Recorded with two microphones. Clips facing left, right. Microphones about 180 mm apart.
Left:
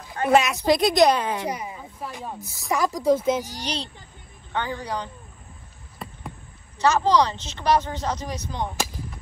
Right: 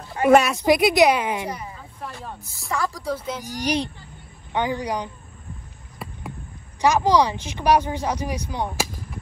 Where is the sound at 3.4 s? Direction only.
15° right (ahead or behind).